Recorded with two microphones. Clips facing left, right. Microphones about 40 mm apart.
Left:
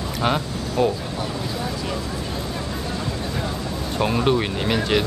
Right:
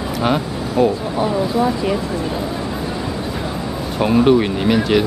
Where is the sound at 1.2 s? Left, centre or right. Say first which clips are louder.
Right 13 dB; right.